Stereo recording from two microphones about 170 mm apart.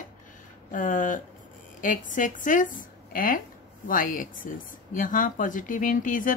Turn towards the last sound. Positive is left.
turn(degrees=50)  # may be behind; listen again after turning